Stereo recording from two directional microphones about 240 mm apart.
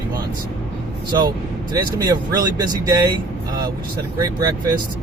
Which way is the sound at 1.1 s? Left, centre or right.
Centre.